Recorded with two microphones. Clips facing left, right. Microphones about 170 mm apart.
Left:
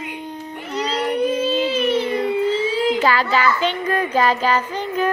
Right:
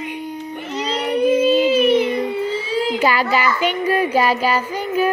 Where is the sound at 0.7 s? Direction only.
25° right (ahead or behind); by 5.0 s 10° right (ahead or behind).